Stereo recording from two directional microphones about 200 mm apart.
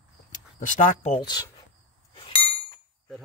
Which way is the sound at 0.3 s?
40° left (ahead or behind).